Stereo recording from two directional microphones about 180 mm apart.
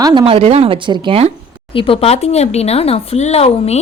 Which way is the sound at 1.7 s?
30° left (ahead or behind).